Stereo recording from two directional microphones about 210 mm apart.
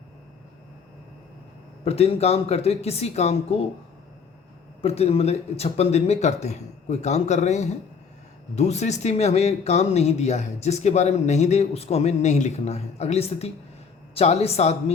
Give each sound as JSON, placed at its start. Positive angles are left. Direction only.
{"t": 1.8, "sound": "speech", "side_deg": 30}
{"t": 4.8, "sound": "speech", "side_deg": 30}